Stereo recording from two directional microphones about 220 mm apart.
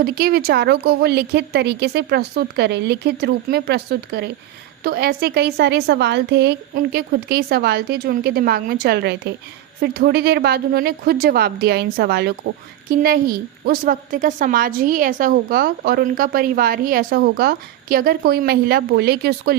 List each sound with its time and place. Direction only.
0.0 s a woman's voice: 40° right (ahead or behind)